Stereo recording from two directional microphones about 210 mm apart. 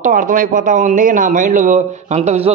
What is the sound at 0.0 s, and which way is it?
A man's voice, 40° right (ahead or behind).